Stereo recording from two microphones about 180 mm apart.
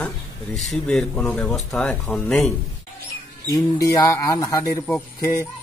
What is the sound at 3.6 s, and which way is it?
Speech, 20° left (ahead or behind).